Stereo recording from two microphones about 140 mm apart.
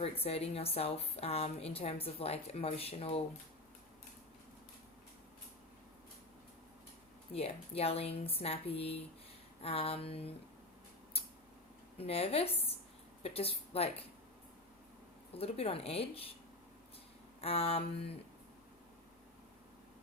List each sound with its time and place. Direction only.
0.0 s a woman's voice: 45° left (ahead or behind)
7.3 s a woman's voice: 45° left (ahead or behind)
11.9 s a woman's voice: 45° left (ahead or behind)
15.4 s a woman's voice: 45° left (ahead or behind)
17.4 s a woman's voice: 45° left (ahead or behind)